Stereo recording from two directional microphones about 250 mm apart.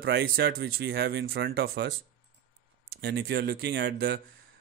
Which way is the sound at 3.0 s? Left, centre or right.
Right.